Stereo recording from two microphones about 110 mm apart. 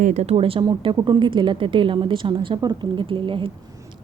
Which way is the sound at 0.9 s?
40° right (ahead or behind).